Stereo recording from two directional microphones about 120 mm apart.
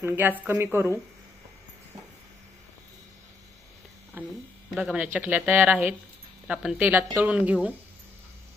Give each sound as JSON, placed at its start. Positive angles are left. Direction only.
{"t": 0.0, "sound": "speech", "side_deg": -20}
{"t": 4.7, "sound": "speech", "side_deg": -5}
{"t": 5.0, "sound": "speech", "side_deg": -15}